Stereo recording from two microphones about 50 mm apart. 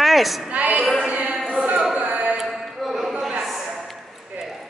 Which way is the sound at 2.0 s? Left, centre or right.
Right.